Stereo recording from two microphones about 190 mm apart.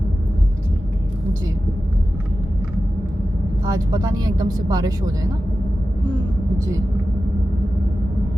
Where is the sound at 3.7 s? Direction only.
20° right (ahead or behind).